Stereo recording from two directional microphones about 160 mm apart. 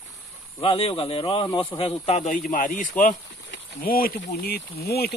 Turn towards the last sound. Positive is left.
turn(degrees=80)